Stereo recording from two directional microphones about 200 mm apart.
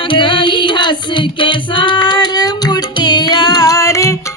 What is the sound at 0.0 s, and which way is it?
Music, 25° left (ahead or behind).